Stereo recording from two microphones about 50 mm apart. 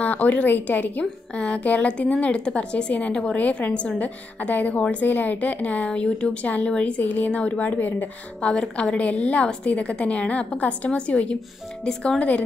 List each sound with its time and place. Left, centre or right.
0.0 s a woman's voice: left
3.3 s a woman's voice: left
5.9 s speech: centre
6.4 s a woman's voice: left
8.4 s a woman's voice: left